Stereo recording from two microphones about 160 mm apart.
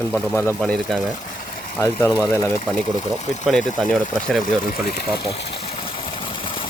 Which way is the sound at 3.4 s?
Centre (ahead or behind).